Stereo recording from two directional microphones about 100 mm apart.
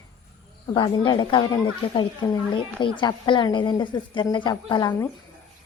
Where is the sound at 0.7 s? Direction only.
50° left (ahead or behind).